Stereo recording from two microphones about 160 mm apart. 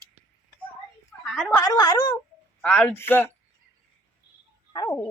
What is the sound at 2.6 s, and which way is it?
Speech, 5° left (ahead or behind).